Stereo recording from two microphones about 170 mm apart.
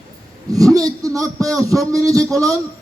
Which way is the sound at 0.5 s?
20° right (ahead or behind).